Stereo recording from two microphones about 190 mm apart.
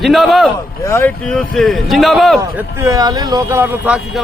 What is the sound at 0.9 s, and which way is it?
A man's voice, 10° left (ahead or behind).